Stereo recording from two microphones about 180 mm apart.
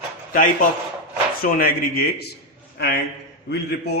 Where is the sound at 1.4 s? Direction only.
55° left (ahead or behind).